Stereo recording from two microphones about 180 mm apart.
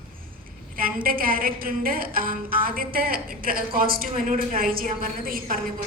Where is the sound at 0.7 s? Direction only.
55° right (ahead or behind).